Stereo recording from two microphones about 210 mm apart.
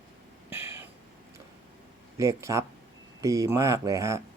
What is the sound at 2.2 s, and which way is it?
Speech, 15° right (ahead or behind).